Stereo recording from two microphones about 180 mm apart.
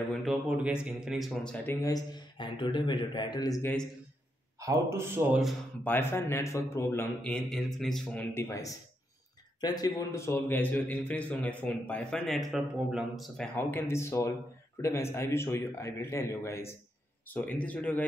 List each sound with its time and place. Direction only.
0.1 s speech: centre (ahead or behind)
1.8 s a man's voice: 20° left (ahead or behind)
4.6 s a man's voice: 15° right (ahead or behind)
5.9 s a man's voice: 15° left (ahead or behind)
13.6 s a man's voice: 10° left (ahead or behind)